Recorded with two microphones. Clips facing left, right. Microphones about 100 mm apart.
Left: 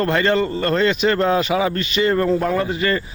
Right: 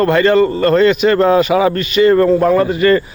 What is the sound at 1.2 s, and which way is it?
Speech, 35° right (ahead or behind).